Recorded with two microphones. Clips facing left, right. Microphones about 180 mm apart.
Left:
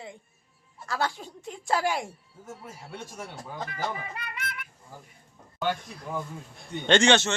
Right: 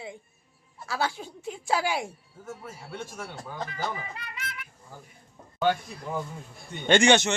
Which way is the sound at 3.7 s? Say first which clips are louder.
Even; 60° left (ahead or behind).